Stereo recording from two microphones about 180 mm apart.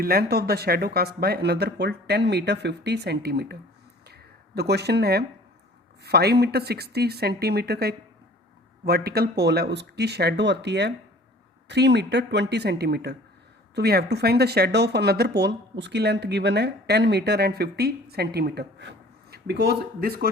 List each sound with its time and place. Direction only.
0.0 s speech: 60° right (ahead or behind)
4.0 s a sound: 65° right (ahead or behind)
6.0 s speech: 65° right (ahead or behind)